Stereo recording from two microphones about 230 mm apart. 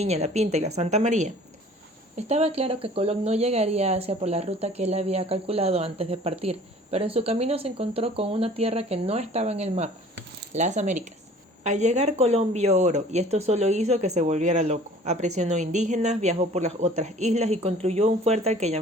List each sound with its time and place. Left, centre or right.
0.0 s speech: right